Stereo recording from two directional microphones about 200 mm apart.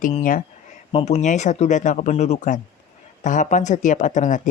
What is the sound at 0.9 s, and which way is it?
Speech, 30° left (ahead or behind).